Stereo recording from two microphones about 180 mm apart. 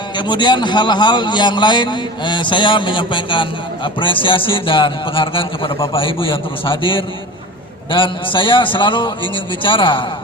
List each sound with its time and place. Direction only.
0.2 s a man's voice: 25° left (ahead or behind)